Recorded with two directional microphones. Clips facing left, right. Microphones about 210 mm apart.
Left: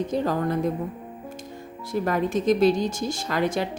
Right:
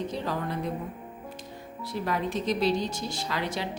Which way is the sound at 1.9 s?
50° left (ahead or behind).